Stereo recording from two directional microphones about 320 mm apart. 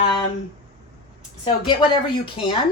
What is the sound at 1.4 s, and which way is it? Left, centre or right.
Speech, centre.